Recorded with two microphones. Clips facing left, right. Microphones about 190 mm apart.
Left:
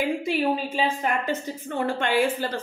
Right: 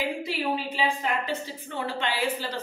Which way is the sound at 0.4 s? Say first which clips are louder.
Left 4 dB; 25° left (ahead or behind).